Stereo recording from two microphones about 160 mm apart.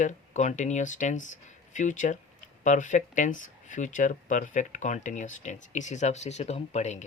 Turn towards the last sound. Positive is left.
turn(degrees=45)  # may be behind; listen again after turning